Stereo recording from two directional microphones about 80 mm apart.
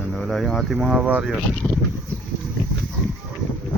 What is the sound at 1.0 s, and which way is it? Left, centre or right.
Speech, centre.